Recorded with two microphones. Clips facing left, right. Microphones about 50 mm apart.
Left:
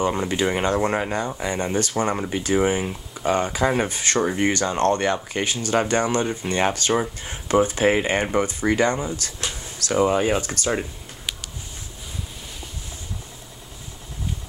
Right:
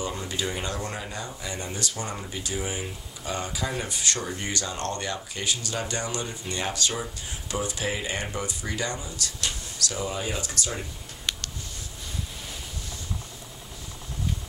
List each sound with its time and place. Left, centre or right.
0.0 s speech: left
9.4 s a sound: left
10.0 s speech: left